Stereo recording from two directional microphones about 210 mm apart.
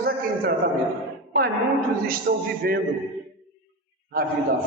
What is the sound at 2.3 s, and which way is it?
Speech, 50° right (ahead or behind).